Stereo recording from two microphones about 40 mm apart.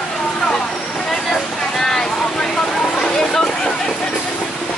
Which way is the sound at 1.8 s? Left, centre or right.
Centre.